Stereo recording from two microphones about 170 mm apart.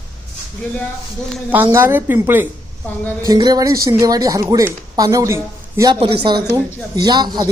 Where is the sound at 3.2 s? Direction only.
20° right (ahead or behind).